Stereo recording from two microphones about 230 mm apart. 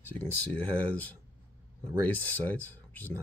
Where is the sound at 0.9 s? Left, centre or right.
Centre.